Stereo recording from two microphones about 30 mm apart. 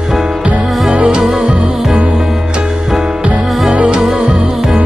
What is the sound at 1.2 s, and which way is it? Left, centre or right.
Music, centre.